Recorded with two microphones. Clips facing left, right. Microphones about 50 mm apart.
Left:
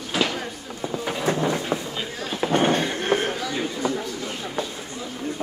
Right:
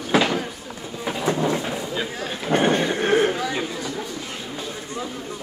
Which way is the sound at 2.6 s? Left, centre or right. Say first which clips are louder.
Right 2 dB; right.